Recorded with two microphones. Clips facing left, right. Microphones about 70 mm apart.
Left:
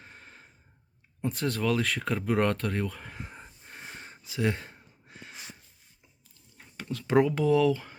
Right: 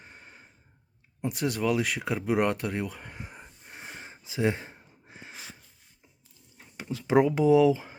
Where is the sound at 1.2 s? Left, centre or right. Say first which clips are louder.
Right 1 dB; centre.